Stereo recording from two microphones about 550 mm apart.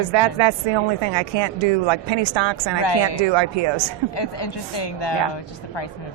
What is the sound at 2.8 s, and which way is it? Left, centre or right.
Speech, left.